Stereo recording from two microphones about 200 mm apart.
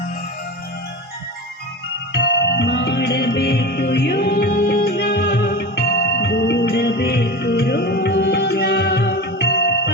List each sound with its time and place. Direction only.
2.1 s music: 60° left (ahead or behind)